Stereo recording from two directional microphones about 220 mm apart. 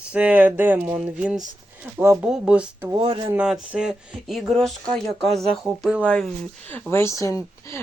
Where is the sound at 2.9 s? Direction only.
25° right (ahead or behind).